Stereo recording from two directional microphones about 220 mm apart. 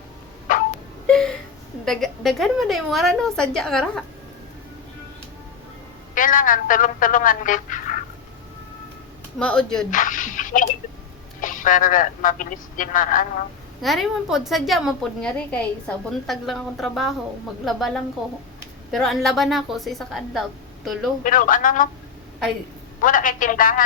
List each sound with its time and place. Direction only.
0.5 s a sound: 35° left (ahead or behind)
1.0 s a sound: 5° left (ahead or behind)
1.8 s a woman's voice: centre (ahead or behind)
6.1 s speech: 40° left (ahead or behind)
9.4 s a woman's voice: 5° left (ahead or behind)
9.9 s dog: 35° left (ahead or behind)
11.3 s speech: 35° left (ahead or behind)
13.8 s a woman's voice: centre (ahead or behind)
21.2 s speech: 40° left (ahead or behind)
23.0 s speech: 40° left (ahead or behind)